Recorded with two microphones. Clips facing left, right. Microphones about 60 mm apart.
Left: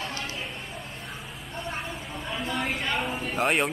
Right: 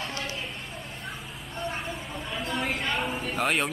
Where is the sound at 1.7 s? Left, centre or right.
Centre.